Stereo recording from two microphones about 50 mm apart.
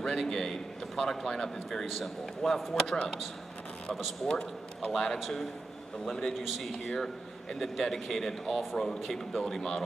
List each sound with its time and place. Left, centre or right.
0.0 s a man's voice: centre
4.3 s a man's voice: centre
4.9 s a man's voice: centre
6.3 s a man's voice: centre